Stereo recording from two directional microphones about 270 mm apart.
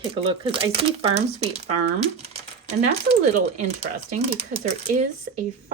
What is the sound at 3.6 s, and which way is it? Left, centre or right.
Speech, right.